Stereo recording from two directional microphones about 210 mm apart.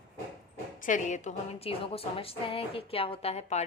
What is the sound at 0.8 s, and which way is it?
A woman's voice, 35° left (ahead or behind).